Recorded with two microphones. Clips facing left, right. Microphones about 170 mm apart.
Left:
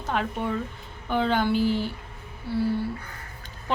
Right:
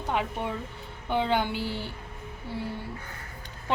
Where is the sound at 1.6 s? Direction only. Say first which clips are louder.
Left 9 dB; 15° left (ahead or behind).